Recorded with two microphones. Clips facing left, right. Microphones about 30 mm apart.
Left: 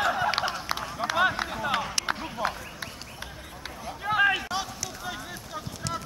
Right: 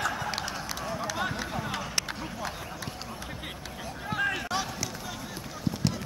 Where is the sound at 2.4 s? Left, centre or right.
Left.